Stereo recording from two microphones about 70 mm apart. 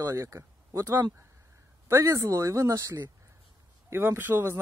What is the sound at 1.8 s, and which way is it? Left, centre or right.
Speech, right.